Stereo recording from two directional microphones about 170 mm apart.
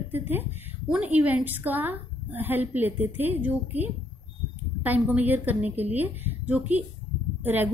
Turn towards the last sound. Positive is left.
turn(degrees=-10)  # may be behind; listen again after turning